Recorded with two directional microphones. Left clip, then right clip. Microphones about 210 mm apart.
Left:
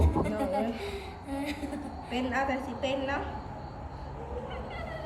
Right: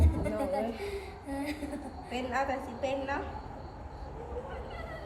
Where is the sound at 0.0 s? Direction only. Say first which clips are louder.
Left 3 dB; 15° left (ahead or behind).